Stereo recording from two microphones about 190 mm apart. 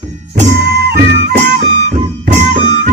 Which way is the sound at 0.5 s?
65° right (ahead or behind).